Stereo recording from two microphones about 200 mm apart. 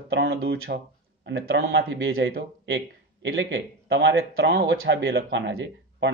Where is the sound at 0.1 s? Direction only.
60° right (ahead or behind).